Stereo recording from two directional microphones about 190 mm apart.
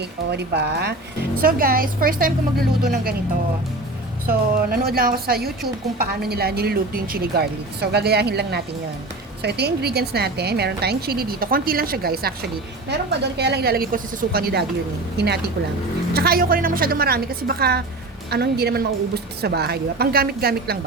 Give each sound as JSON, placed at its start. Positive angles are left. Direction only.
{"t": 0.0, "sound": "a woman's voice", "side_deg": -60}
{"t": 4.3, "sound": "a woman's voice", "side_deg": -50}
{"t": 16.1, "sound": "a woman's voice", "side_deg": -55}